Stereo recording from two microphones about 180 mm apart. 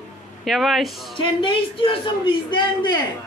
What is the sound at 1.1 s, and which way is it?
A man's voice, 30° left (ahead or behind).